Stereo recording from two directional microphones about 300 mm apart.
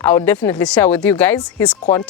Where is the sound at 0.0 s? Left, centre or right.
Centre.